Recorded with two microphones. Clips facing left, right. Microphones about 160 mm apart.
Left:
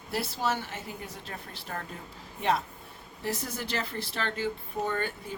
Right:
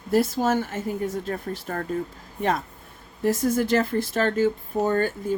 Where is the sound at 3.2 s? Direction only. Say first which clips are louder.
Right 12 dB; 45° right (ahead or behind).